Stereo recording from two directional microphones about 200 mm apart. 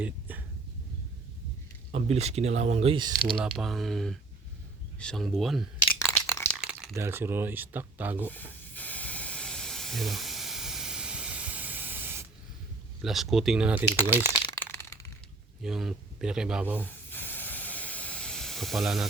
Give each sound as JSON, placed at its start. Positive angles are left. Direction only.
{"t": 0.0, "sound": "a sound", "side_deg": -10}
{"t": 1.9, "sound": "speech", "side_deg": -30}
{"t": 3.2, "sound": "speech", "side_deg": 0}
{"t": 6.1, "sound": "a sound", "side_deg": 5}
{"t": 6.7, "sound": "speech", "side_deg": -5}
{"t": 8.3, "sound": "hiss", "side_deg": 10}
{"t": 13.0, "sound": "speech", "side_deg": 0}
{"t": 14.6, "sound": "a sound", "side_deg": 10}
{"t": 15.6, "sound": "speech", "side_deg": 0}
{"t": 16.8, "sound": "hiss", "side_deg": 10}